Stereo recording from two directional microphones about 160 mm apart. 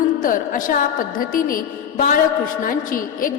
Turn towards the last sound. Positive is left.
turn(degrees=60)  # may be behind; listen again after turning